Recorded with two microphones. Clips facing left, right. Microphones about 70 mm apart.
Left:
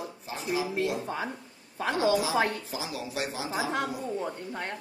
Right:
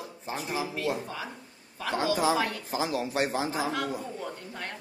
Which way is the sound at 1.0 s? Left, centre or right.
Left.